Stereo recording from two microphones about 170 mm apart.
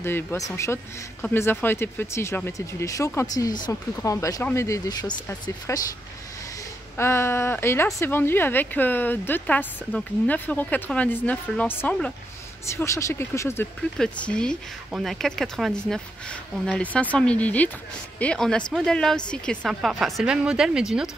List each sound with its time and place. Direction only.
0.0 s speech: 15° left (ahead or behind)
7.0 s speech: 15° left (ahead or behind)
13.9 s speech: 5° left (ahead or behind)